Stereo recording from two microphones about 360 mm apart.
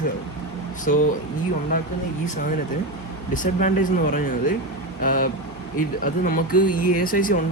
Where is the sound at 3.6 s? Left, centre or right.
Left.